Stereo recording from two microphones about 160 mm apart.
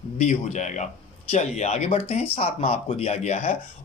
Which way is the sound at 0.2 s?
50° left (ahead or behind).